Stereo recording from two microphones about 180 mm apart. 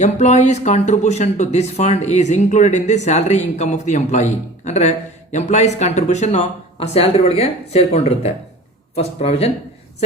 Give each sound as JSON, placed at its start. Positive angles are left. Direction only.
{"t": 0.0, "sound": "speech", "side_deg": 40}